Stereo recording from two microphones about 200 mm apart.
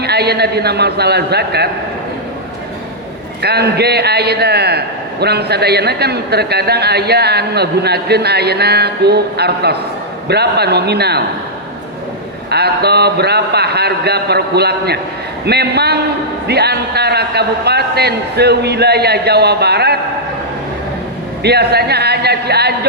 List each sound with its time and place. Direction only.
0.0 s a man's voice: 55° right (ahead or behind)
3.4 s a man's voice: 55° right (ahead or behind)
12.5 s a man's voice: 55° right (ahead or behind)
21.4 s a man's voice: 55° right (ahead or behind)